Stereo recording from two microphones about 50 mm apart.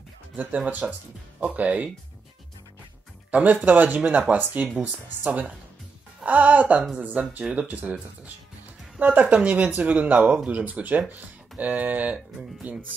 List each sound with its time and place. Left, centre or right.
0.7 s speech: right
3.3 s speech: right
9.0 s speech: right